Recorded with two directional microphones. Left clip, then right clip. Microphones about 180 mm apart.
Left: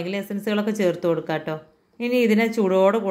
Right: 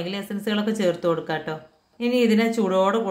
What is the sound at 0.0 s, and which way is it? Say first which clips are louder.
Speech: left 2 dB; 15° left (ahead or behind).